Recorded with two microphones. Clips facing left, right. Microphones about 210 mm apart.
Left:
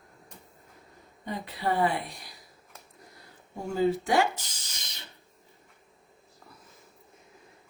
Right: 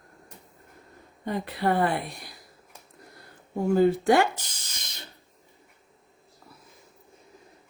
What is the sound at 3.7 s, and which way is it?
Speech, 60° right (ahead or behind).